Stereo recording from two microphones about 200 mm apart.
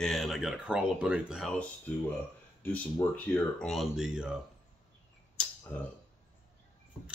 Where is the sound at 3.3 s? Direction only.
Centre (ahead or behind).